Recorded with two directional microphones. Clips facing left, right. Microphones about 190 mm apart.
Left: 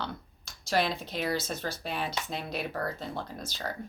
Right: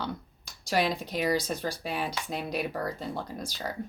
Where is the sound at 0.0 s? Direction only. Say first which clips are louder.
Right 3 dB; 10° right (ahead or behind).